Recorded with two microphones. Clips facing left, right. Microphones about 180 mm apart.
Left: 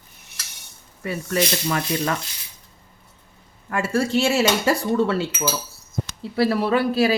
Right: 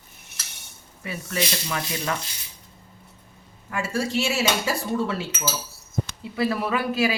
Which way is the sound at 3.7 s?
55° left (ahead or behind).